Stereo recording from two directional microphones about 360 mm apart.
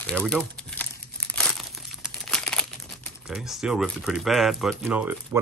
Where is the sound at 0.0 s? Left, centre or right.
Centre.